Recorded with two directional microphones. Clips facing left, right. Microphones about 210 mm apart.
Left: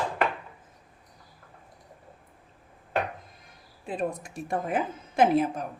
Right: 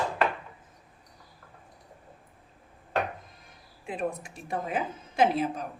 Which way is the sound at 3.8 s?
45° left (ahead or behind).